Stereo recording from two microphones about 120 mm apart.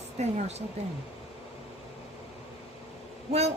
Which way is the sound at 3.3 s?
60° right (ahead or behind).